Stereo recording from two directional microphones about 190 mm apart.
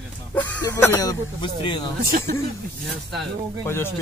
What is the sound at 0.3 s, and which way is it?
Speech, 10° left (ahead or behind).